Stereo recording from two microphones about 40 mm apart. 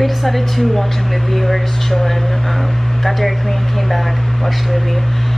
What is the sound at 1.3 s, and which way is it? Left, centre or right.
Speech, centre.